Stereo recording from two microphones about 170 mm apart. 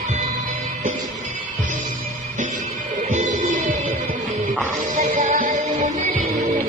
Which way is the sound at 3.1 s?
45° right (ahead or behind).